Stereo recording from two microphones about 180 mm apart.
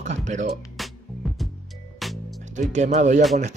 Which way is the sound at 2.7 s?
40° right (ahead or behind).